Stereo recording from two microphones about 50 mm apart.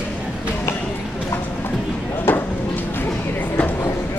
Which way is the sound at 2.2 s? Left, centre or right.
Left.